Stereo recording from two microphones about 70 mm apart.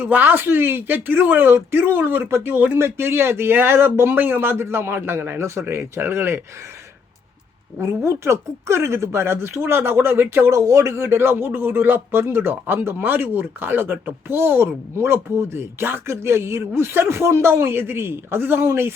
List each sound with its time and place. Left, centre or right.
0.0 s speech: right
1.5 s speech: right
2.7 s speech: right
4.1 s speech: right
8.0 s speech: right